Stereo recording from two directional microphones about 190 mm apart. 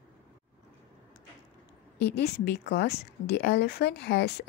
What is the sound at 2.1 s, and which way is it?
Speech, 60° left (ahead or behind).